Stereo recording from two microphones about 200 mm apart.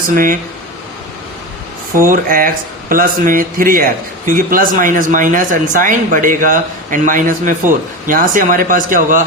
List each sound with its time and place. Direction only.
2.0 s speech: 45° right (ahead or behind)